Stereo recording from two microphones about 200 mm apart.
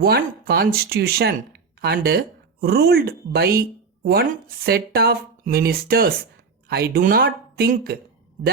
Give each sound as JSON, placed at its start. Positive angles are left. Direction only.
{"t": 0.0, "sound": "speech", "side_deg": -50}